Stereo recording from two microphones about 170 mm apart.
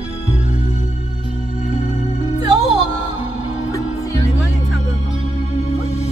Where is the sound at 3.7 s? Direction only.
20° left (ahead or behind).